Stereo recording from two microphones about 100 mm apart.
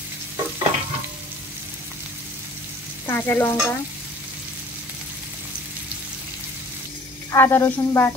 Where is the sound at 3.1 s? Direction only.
20° left (ahead or behind).